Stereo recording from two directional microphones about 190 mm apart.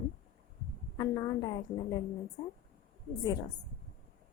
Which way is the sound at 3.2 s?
20° left (ahead or behind).